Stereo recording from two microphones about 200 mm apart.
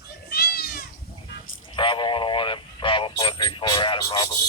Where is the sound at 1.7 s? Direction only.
25° left (ahead or behind).